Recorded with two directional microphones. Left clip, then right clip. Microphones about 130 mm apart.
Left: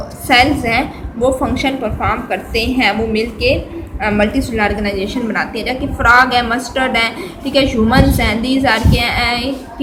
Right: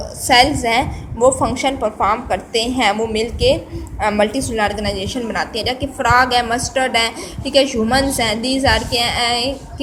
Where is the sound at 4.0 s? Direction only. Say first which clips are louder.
Left 1 dB; 40° right (ahead or behind).